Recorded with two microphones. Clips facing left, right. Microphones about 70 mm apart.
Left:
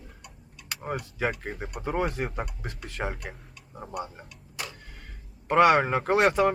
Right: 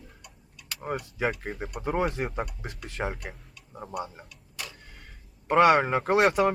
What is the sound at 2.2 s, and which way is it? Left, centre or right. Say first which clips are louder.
Speech: right 1 dB; centre.